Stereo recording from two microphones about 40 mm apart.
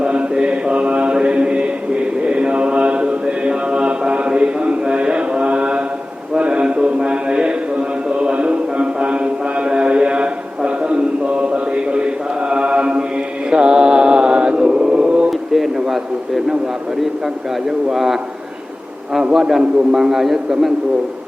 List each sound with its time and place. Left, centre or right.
0.0 s mantra: right
6.3 s a sound: right
13.5 s mantra: right
15.3 s a man's voice: centre
17.7 s a man's voice: centre
19.3 s a man's voice: centre